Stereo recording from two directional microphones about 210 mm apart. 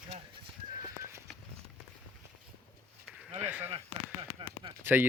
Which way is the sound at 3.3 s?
10° right (ahead or behind).